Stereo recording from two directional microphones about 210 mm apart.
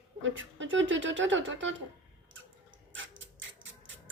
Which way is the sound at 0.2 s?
65° right (ahead or behind).